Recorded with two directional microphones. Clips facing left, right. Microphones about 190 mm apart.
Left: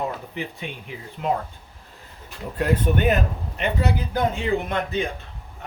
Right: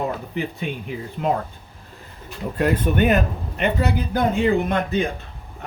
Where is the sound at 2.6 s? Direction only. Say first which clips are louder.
Right 2 dB; 60° right (ahead or behind).